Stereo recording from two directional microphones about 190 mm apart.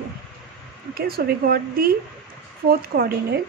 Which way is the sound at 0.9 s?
55° right (ahead or behind).